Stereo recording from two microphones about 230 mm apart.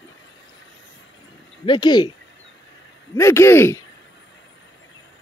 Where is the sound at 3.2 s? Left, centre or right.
Centre.